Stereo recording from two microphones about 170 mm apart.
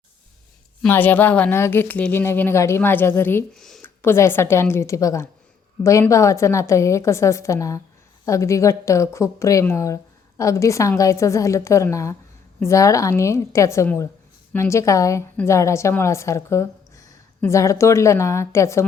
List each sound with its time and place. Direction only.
0.8 s a woman's voice: 10° left (ahead or behind)
3.5 s a woman's voice: centre (ahead or behind)